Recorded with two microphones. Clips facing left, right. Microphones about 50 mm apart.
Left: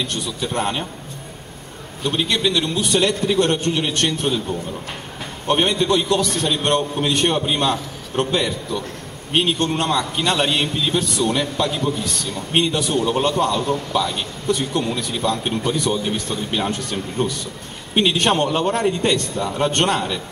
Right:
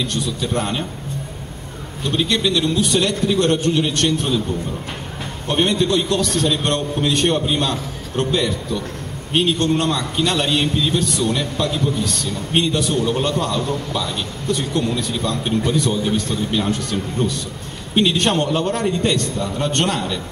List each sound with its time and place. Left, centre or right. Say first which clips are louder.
0.1 s a man's voice: right 2 dB; left
2.0 s a man's voice: right 1 dB; centre
5.5 s a man's voice: even; centre